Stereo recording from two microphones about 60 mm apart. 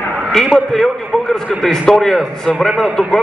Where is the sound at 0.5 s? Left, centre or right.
Centre.